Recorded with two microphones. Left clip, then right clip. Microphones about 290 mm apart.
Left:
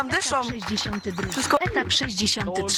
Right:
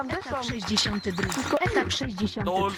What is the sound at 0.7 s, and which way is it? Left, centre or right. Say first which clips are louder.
Speech: right 4 dB; centre.